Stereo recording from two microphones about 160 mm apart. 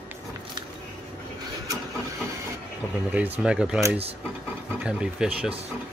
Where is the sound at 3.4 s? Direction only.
5° right (ahead or behind).